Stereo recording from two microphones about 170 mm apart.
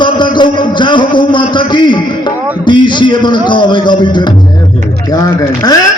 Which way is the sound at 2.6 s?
25° left (ahead or behind).